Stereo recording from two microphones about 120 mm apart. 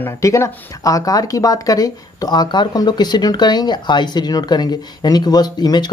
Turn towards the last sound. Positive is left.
turn(degrees=35)  # may be behind; listen again after turning